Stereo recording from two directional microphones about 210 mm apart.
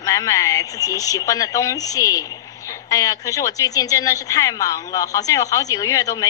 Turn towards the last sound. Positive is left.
turn(degrees=15)  # may be behind; listen again after turning